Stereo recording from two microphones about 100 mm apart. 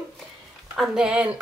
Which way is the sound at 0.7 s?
5° right (ahead or behind).